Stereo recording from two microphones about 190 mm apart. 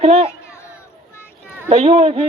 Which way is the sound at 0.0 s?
30° right (ahead or behind).